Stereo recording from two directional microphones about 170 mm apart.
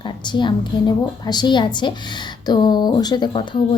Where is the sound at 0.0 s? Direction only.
25° left (ahead or behind).